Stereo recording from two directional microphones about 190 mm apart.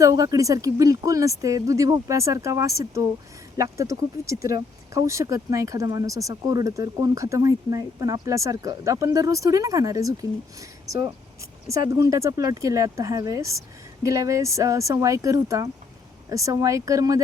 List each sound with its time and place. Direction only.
0.0 s speech: 15° right (ahead or behind)